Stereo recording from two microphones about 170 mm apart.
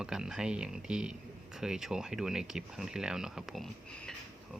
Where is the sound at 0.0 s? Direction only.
5° right (ahead or behind).